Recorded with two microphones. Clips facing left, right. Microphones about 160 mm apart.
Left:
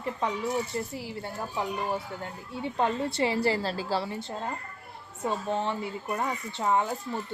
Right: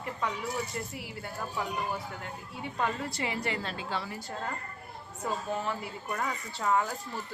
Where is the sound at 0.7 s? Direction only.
30° left (ahead or behind).